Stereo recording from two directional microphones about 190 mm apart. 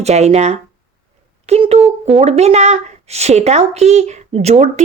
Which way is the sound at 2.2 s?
35° right (ahead or behind).